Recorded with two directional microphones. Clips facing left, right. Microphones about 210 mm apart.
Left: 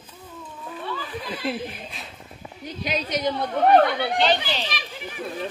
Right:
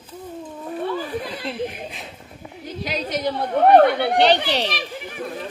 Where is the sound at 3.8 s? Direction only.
60° right (ahead or behind).